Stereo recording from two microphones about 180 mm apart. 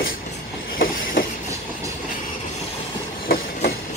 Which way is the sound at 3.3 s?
55° left (ahead or behind).